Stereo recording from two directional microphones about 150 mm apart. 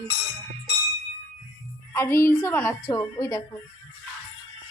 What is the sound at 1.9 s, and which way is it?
A woman's voice, 20° left (ahead or behind).